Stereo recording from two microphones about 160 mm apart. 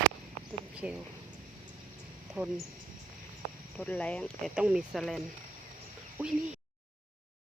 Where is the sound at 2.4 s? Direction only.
15° right (ahead or behind).